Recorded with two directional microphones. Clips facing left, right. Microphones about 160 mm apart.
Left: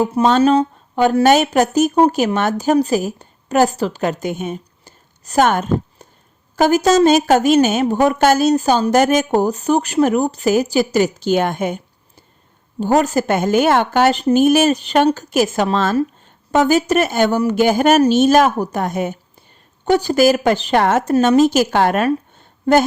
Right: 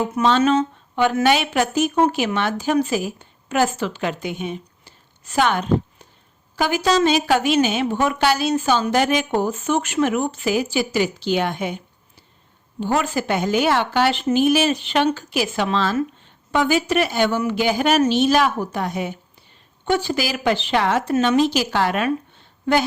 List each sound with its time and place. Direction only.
0.0 s a woman's voice: 40° left (ahead or behind)
12.8 s a woman's voice: 40° left (ahead or behind)